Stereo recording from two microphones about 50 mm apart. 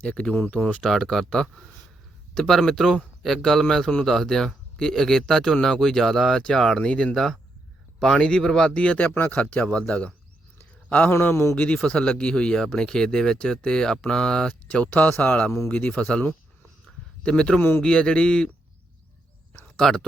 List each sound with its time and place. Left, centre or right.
0.0 s speech: left
0.3 s speech: left
0.8 s speech: centre
2.3 s a man's voice: centre
8.7 s speech: left
17.2 s speech: centre
17.6 s speech: left
17.8 s speech: centre
19.6 s speech: centre